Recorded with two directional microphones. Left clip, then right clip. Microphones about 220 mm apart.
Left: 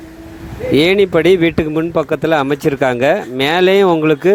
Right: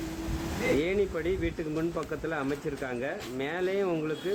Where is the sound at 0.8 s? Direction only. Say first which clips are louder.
Left 18 dB; 50° left (ahead or behind).